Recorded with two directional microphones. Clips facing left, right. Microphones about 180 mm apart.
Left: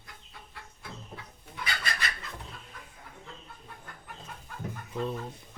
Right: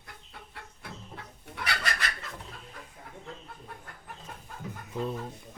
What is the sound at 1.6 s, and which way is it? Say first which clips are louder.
Fowl: right 3 dB; 75° right (ahead or behind).